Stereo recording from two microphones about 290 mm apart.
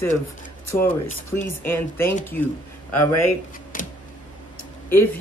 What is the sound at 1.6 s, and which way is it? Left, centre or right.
Speech, centre.